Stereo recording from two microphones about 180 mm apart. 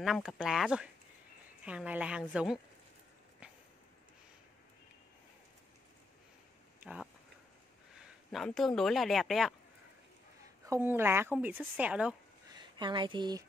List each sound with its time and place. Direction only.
0.0 s speech: centre (ahead or behind)
6.8 s speech: 5° right (ahead or behind)
8.3 s speech: centre (ahead or behind)
10.7 s a woman's voice: 10° right (ahead or behind)
12.4 s a sound: 25° right (ahead or behind)